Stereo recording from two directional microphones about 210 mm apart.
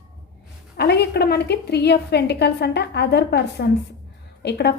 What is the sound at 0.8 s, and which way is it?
A woman's voice, 50° left (ahead or behind).